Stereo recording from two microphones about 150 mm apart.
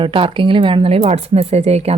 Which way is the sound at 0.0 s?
35° right (ahead or behind).